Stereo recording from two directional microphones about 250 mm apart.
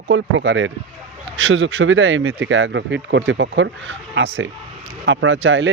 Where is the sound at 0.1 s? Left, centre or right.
Right.